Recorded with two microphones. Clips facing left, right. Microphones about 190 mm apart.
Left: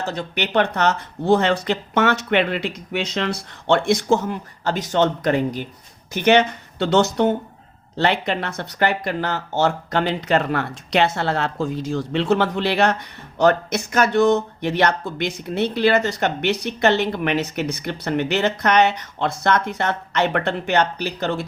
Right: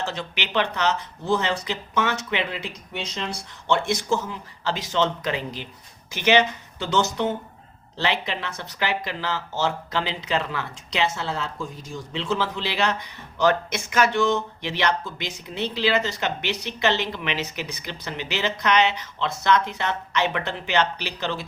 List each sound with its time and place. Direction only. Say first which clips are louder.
0.0 s speech: left 5 dB; 40° left (ahead or behind)
13.4 s speech: left 4 dB; 45° left (ahead or behind)